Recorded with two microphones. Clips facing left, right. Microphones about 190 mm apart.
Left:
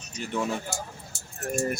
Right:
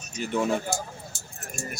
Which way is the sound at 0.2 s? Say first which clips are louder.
Right 3 dB; centre (ahead or behind).